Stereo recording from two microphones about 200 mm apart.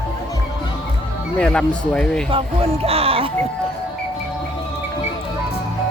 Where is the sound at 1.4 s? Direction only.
5° left (ahead or behind).